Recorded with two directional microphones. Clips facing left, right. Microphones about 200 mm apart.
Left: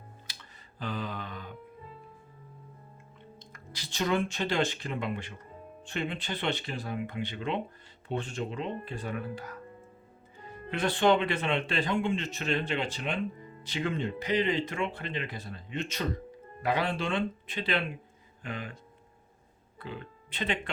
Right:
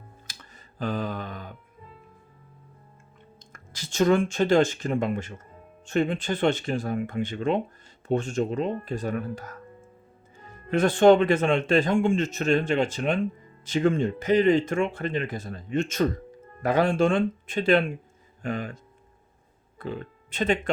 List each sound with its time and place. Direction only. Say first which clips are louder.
0.3 s a sound: right 3 dB; 45° right (ahead or behind)
3.5 s speech: right 7 dB; 45° right (ahead or behind)
10.7 s speech: right 8 dB; 45° right (ahead or behind)
19.8 s speech: right 7 dB; 45° right (ahead or behind)